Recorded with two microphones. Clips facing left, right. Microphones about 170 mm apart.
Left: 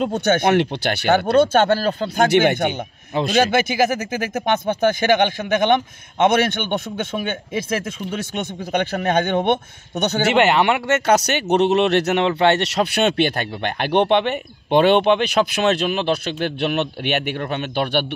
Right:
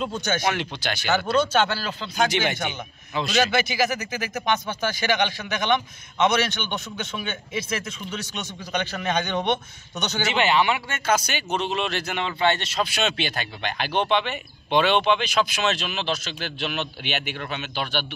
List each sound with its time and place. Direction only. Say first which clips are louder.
0.0 s a man's voice: left 7 dB; 60° left (ahead or behind)